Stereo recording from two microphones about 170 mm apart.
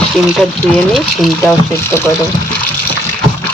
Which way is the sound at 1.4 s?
15° left (ahead or behind).